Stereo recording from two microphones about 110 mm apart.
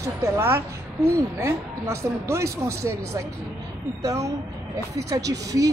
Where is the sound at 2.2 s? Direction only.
25° right (ahead or behind).